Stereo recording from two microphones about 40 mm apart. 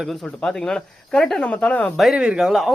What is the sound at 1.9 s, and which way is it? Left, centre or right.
Speech, centre.